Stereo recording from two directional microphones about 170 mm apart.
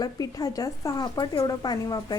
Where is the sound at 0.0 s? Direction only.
20° left (ahead or behind).